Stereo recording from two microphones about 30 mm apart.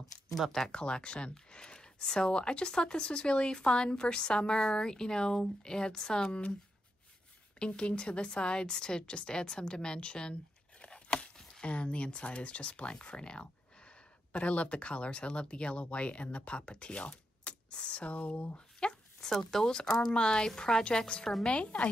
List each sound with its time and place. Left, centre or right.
0.7 s speech: left
7.5 s speech: left
10.8 s a sound: left
11.6 s speech: left
18.8 s a sound: left
19.2 s speech: centre
21.1 s speech: left